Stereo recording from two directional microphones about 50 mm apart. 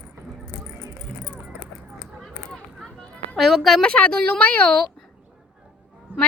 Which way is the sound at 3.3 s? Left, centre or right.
Centre.